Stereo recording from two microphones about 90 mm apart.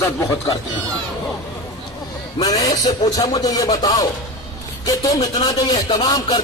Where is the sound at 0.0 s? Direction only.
35° left (ahead or behind).